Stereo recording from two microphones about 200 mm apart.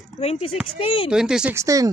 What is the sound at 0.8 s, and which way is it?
Speech, 30° left (ahead or behind).